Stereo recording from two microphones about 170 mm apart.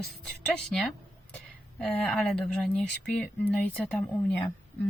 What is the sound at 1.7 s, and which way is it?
Speech, 10° left (ahead or behind).